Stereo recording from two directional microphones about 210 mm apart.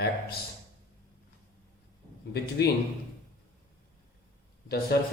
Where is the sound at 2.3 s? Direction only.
50° left (ahead or behind).